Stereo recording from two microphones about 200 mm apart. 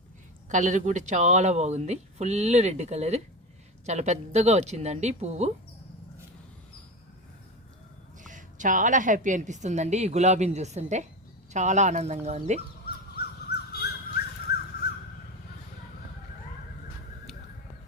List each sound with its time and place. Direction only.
0.4 s a woman's voice: 40° right (ahead or behind)
8.2 s a woman's voice: 40° right (ahead or behind)
13.5 s a sound: 55° left (ahead or behind)